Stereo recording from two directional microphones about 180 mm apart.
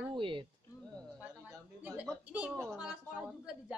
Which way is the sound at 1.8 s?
10° right (ahead or behind).